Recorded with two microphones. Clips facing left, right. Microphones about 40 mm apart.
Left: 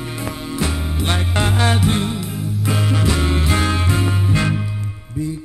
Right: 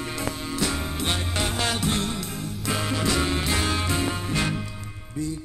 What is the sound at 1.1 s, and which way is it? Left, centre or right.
Music, left.